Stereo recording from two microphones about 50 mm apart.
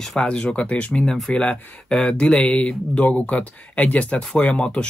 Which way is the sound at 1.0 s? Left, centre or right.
Centre.